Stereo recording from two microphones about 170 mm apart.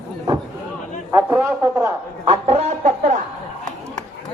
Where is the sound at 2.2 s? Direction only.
40° right (ahead or behind).